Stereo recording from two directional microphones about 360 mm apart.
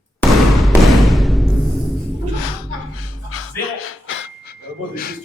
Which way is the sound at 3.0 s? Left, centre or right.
Left.